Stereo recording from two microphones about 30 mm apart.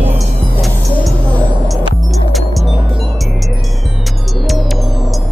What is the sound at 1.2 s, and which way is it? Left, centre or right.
Music, left.